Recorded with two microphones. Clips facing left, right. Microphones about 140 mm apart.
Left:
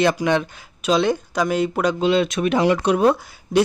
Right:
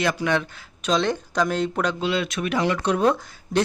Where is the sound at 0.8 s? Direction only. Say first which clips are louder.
Left 4 dB; 10° left (ahead or behind).